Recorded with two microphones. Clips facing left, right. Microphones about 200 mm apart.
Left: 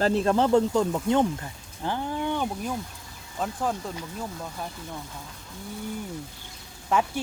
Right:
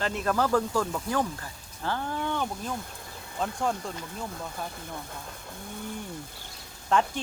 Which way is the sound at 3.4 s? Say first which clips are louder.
Left 1 dB; centre (ahead or behind).